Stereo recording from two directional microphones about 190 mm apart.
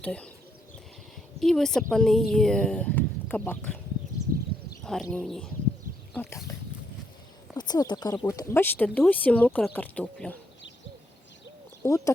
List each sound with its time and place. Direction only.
0.0 s speech: 5° left (ahead or behind)
1.4 s speech: centre (ahead or behind)
4.8 s bird: centre (ahead or behind)
5.1 s speech: 5° left (ahead or behind)
7.5 s speech: 20° left (ahead or behind)
11.8 s speech: 15° left (ahead or behind)